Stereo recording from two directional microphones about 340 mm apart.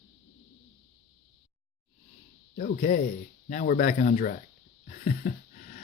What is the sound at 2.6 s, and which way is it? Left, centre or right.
Speech, left.